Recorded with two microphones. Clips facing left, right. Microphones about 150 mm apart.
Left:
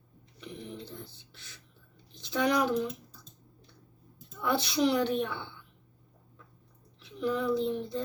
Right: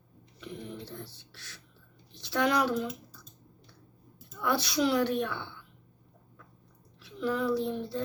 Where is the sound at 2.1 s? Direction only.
20° left (ahead or behind).